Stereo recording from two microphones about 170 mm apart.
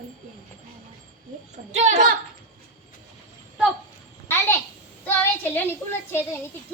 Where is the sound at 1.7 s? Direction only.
45° right (ahead or behind).